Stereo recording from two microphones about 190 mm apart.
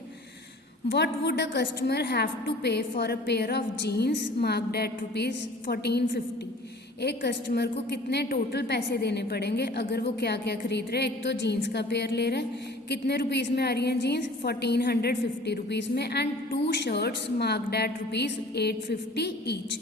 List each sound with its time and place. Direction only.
0.9 s a woman's voice: 60° left (ahead or behind)